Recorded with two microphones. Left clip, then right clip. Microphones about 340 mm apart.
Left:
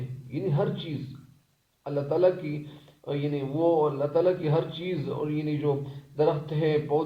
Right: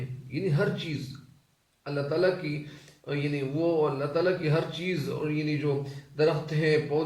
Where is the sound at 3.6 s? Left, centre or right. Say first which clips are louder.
Left 3 dB; centre.